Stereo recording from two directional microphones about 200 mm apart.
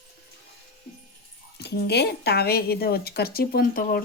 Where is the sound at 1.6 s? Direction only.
55° left (ahead or behind).